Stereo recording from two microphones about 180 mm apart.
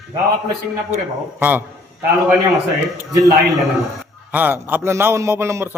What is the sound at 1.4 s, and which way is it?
Speech, 10° right (ahead or behind).